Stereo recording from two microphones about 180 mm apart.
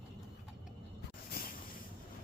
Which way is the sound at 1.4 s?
55° left (ahead or behind).